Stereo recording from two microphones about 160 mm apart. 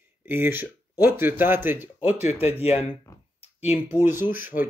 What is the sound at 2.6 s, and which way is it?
Speech, 40° left (ahead or behind).